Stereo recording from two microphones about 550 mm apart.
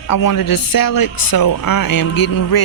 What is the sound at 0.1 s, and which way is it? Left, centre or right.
Speech, left.